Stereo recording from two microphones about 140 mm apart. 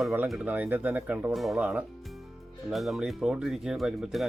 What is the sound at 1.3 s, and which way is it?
Speech, centre (ahead or behind).